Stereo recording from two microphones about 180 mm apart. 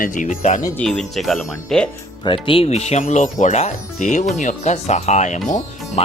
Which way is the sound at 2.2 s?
30° left (ahead or behind).